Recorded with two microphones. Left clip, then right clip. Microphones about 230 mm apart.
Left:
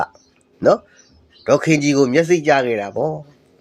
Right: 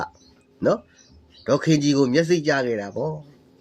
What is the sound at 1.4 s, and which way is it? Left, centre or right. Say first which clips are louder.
Speech: left 5 dB; centre.